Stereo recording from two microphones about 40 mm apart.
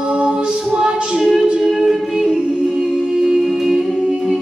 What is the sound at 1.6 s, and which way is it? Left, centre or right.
Music, centre.